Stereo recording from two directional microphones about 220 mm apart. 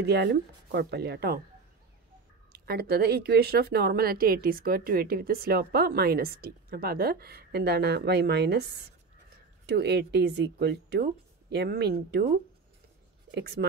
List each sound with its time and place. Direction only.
0.0 s speech: 50° right (ahead or behind)
2.5 s speech: 45° right (ahead or behind)